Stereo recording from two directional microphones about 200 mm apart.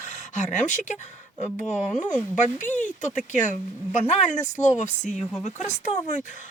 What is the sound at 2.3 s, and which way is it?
A woman's voice, 35° left (ahead or behind).